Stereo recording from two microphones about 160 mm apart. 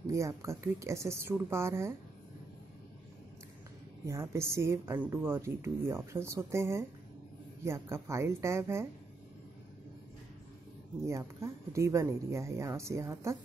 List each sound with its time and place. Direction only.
0.0 s a woman's voice: 20° right (ahead or behind)
4.0 s a woman's voice: 20° right (ahead or behind)
11.1 s a woman's voice: 20° right (ahead or behind)